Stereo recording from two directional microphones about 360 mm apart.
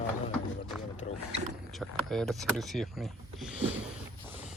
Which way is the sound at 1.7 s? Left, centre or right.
Centre.